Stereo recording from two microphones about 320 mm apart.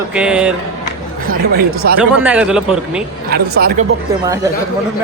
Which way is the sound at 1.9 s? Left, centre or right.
Centre.